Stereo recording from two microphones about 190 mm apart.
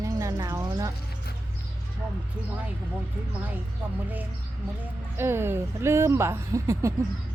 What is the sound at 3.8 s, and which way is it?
Speech, 10° right (ahead or behind).